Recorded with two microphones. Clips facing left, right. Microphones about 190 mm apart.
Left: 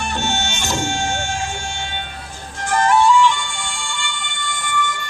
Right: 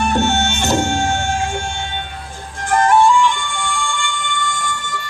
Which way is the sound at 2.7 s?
50° right (ahead or behind).